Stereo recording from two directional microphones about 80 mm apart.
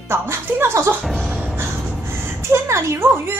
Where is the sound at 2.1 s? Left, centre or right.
Right.